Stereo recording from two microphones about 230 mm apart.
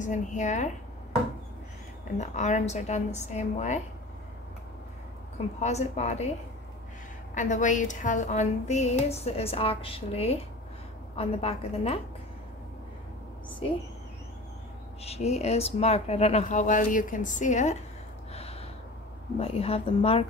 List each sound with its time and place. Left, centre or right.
0.0 s speech: left
2.1 s speech: left
5.6 s speech: left
7.3 s speech: left
15.0 s speech: left
18.3 s gasp: left
19.3 s speech: left